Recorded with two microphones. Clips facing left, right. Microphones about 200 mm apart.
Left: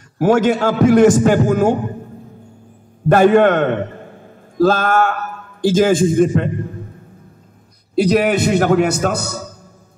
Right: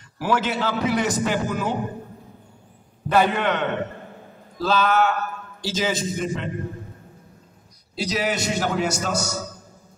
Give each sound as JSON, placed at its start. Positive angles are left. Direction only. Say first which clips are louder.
{"t": 0.2, "sound": "a man's voice", "louder": "left 10 dB", "side_deg": 50}
{"t": 3.1, "sound": "a man's voice", "louder": "left 10 dB", "side_deg": 50}
{"t": 7.9, "sound": "a man's voice", "louder": "left 11 dB", "side_deg": 55}